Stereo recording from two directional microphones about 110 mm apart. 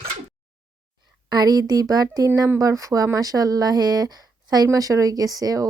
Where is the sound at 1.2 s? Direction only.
35° right (ahead or behind).